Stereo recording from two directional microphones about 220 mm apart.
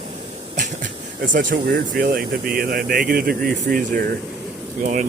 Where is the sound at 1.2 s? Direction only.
35° right (ahead or behind).